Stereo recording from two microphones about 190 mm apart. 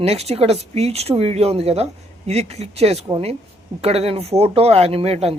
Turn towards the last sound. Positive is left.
turn(degrees=-30)  # may be behind; listen again after turning